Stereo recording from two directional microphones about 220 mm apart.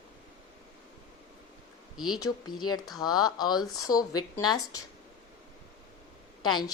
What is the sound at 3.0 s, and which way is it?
A woman's voice, 20° left (ahead or behind).